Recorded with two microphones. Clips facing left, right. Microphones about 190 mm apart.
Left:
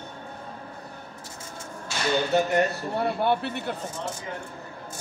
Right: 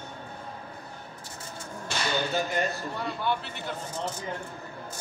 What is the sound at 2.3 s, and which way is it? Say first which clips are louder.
A man's voice: left 6 dB; 65° left (ahead or behind).